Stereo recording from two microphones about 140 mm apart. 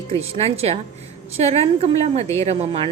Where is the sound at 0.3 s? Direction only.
45° right (ahead or behind).